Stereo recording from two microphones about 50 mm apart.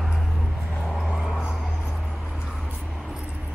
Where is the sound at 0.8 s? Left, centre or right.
Centre.